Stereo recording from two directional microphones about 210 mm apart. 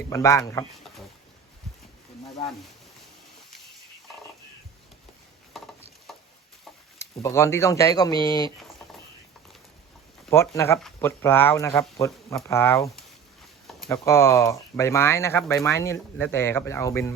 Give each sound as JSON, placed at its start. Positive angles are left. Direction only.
{"t": 0.1, "sound": "speech", "side_deg": 15}
{"t": 6.1, "sound": "a sound", "side_deg": 0}
{"t": 7.0, "sound": "speech", "side_deg": 15}
{"t": 10.3, "sound": "speech", "side_deg": 10}
{"t": 13.7, "sound": "a sound", "side_deg": 0}
{"t": 13.9, "sound": "speech", "side_deg": 15}